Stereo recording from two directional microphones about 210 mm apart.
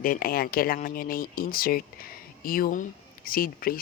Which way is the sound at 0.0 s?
40° left (ahead or behind).